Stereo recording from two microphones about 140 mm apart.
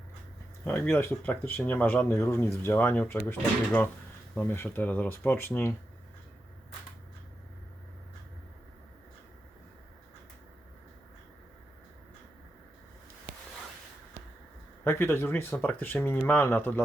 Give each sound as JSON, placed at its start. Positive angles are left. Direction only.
{"t": 0.6, "sound": "speech", "side_deg": 15}
{"t": 14.8, "sound": "speech", "side_deg": 15}